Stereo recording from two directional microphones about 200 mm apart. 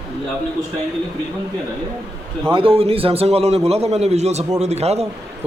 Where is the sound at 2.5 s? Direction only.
25° right (ahead or behind).